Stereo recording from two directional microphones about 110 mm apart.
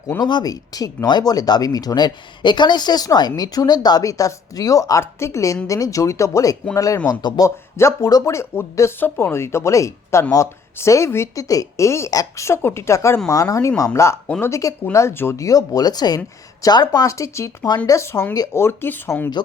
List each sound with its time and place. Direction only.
0.2 s speech: 40° left (ahead or behind)
7.4 s speech: 25° left (ahead or behind)
14.3 s speech: 15° left (ahead or behind)
14.5 s speech: 30° left (ahead or behind)